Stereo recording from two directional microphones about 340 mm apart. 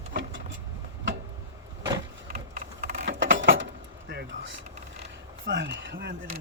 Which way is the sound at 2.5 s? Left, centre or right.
Right.